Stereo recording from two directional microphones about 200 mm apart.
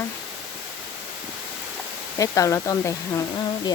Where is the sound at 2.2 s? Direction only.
15° left (ahead or behind).